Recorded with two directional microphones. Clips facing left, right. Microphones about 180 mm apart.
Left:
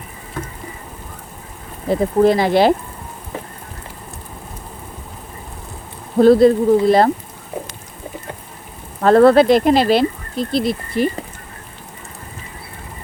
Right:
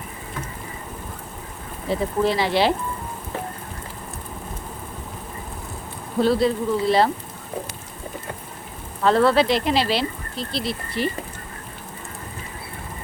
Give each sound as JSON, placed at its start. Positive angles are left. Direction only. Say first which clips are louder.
{"t": 1.9, "sound": "speech", "louder": "left 8 dB", "side_deg": 50}
{"t": 6.1, "sound": "speech", "louder": "left 9 dB", "side_deg": 50}
{"t": 9.0, "sound": "speech", "louder": "left 7 dB", "side_deg": 50}